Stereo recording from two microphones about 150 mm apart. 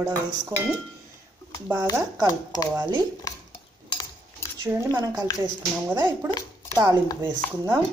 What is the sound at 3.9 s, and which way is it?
Cutlery, 25° left (ahead or behind).